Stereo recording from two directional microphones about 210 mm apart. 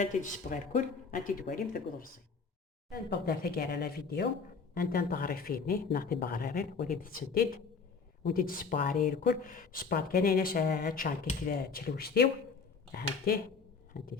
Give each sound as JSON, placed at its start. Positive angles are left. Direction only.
{"t": 0.0, "sound": "speech", "side_deg": 35}